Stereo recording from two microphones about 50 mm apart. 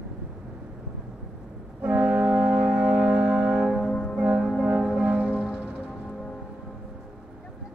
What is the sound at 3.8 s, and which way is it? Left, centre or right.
Music, centre.